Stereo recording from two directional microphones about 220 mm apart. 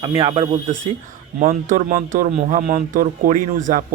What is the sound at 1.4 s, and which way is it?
A man's voice, 35° right (ahead or behind).